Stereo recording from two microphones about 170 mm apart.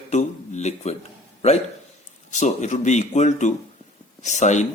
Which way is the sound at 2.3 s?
45° left (ahead or behind).